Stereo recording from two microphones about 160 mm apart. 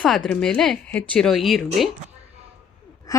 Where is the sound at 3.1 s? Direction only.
20° left (ahead or behind).